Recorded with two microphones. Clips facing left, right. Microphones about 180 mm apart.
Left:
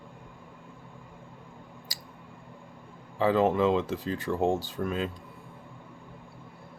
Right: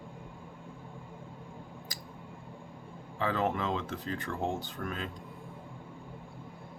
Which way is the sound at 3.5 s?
10° left (ahead or behind).